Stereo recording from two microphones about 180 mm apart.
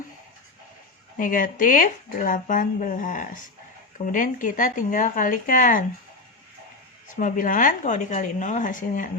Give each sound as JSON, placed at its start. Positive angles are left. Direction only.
{"t": 1.2, "sound": "speech", "side_deg": 50}
{"t": 7.2, "sound": "speech", "side_deg": 50}